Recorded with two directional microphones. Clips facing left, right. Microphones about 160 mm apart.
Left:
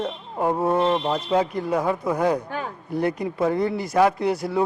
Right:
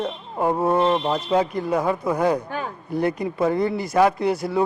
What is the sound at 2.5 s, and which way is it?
A woman's voice, 15° right (ahead or behind).